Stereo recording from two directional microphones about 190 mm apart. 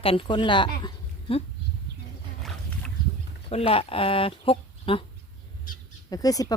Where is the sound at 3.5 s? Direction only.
30° left (ahead or behind).